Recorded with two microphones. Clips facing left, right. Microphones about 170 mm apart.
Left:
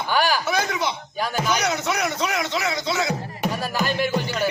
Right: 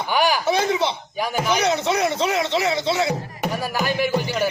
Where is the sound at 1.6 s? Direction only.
30° right (ahead or behind).